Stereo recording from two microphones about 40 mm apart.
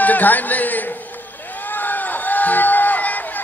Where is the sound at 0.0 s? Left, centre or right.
Left.